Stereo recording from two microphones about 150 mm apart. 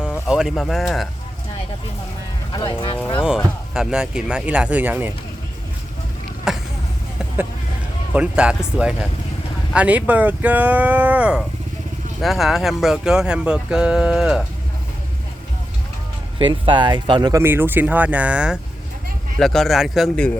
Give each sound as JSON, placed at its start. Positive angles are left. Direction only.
{"t": 0.3, "sound": "speech", "side_deg": -5}
{"t": 2.5, "sound": "speech", "side_deg": 30}
{"t": 3.2, "sound": "speech", "side_deg": -5}
{"t": 6.5, "sound": "a sound", "side_deg": -5}
{"t": 8.1, "sound": "speech", "side_deg": -5}
{"t": 16.4, "sound": "speech", "side_deg": -30}
{"t": 17.4, "sound": "speech", "side_deg": -15}